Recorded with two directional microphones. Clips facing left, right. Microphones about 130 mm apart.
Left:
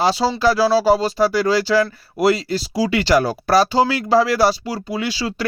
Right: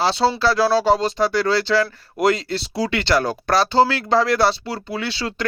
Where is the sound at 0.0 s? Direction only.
10° left (ahead or behind).